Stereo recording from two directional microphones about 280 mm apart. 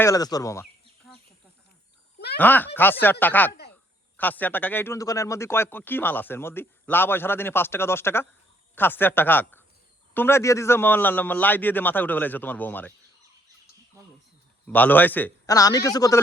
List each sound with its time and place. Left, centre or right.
0.0 s speech: centre
2.1 s a sound: left
2.4 s speech: centre
14.7 s speech: centre